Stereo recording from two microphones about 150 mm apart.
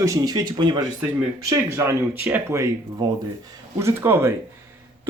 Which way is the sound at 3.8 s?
15° right (ahead or behind).